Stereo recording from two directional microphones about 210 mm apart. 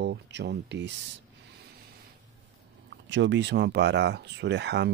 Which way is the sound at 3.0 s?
60° right (ahead or behind).